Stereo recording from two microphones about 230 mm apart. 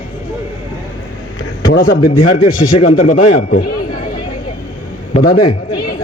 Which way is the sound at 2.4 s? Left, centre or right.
Left.